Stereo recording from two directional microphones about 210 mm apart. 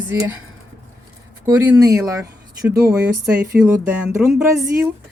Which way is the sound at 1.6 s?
15° right (ahead or behind).